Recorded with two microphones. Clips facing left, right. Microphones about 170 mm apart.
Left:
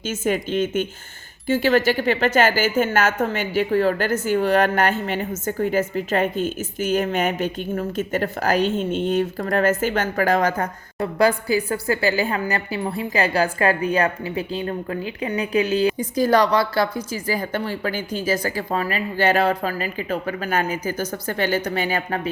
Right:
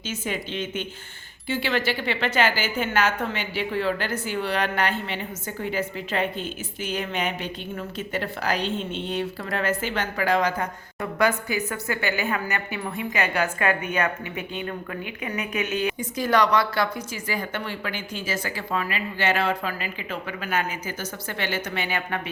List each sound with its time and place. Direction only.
0.0 s a woman's voice: 45° left (ahead or behind)
11.0 s a woman's voice: 35° left (ahead or behind)